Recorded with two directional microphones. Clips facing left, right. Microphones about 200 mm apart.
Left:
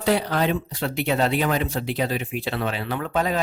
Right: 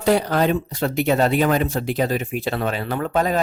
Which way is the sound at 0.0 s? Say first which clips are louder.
Right 4 dB; 45° right (ahead or behind).